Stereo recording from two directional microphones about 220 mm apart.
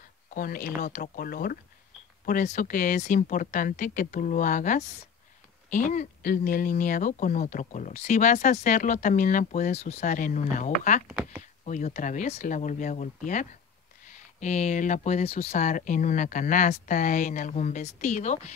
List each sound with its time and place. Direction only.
0.3 s speech: 40° left (ahead or behind)
11.1 s speech: 5° right (ahead or behind)
11.6 s speech: 35° left (ahead or behind)